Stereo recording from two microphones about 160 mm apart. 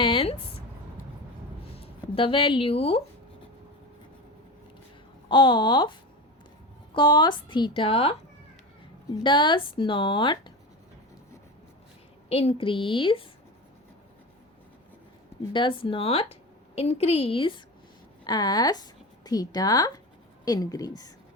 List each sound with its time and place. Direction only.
0.0 s a sound: 35° left (ahead or behind)
1.7 s speech: 35° left (ahead or behind)
5.3 s a woman's voice: 30° left (ahead or behind)
9.2 s a woman's voice: 30° left (ahead or behind)
12.3 s a woman's voice: 40° left (ahead or behind)
15.5 s a woman's voice: 30° left (ahead or behind)